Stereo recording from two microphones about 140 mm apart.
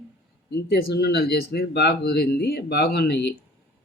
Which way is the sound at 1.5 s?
90° left.